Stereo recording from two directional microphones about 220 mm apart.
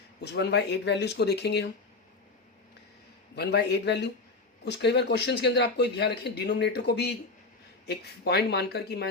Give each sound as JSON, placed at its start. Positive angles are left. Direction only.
{"t": 0.2, "sound": "a man's voice", "side_deg": 50}
{"t": 3.3, "sound": "a man's voice", "side_deg": 50}